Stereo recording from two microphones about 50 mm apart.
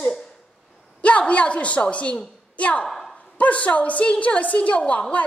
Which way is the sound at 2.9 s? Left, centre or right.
Centre.